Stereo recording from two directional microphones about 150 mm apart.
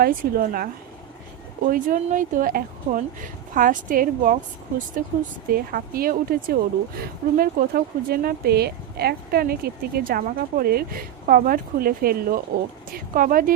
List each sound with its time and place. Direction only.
0.0 s speech: 75° right (ahead or behind)
1.6 s speech: 65° right (ahead or behind)
5.5 s speech: 75° right (ahead or behind)